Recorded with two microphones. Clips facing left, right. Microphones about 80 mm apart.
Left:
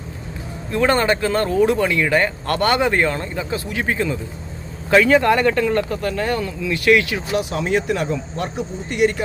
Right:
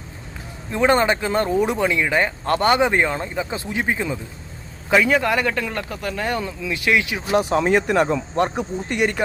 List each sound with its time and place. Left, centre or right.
0.7 s speech: centre
7.3 s speech: right